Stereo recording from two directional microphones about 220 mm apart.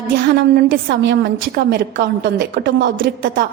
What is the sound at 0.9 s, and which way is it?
A woman's voice, 50° right (ahead or behind).